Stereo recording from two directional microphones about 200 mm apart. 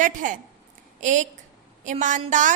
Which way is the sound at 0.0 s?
40° right (ahead or behind).